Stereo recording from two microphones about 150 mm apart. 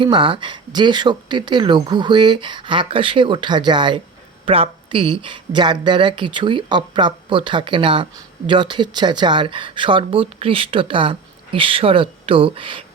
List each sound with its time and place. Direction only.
0.0 s speech: 30° right (ahead or behind)